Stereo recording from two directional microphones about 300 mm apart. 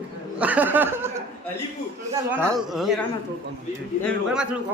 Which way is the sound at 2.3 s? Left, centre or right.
Centre.